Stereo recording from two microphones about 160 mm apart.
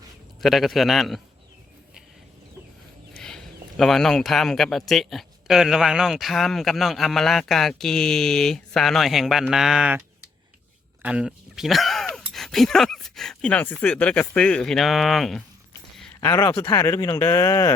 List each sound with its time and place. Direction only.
0.4 s speech: centre (ahead or behind)
3.2 s speech: 5° left (ahead or behind)
11.0 s speech: 5° right (ahead or behind)
16.2 s speech: 15° left (ahead or behind)